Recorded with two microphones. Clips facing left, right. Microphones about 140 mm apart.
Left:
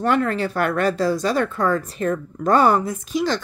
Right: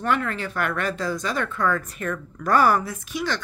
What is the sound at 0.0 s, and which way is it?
Speech, 40° left (ahead or behind).